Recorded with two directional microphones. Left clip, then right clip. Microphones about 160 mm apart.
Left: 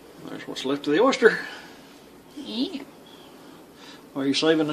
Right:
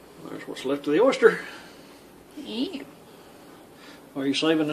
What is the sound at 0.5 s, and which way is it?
Speech, 20° left (ahead or behind).